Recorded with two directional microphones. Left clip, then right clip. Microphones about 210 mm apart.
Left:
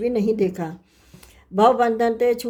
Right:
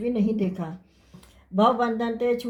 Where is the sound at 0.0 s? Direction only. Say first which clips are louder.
Left 6 dB; 45° left (ahead or behind).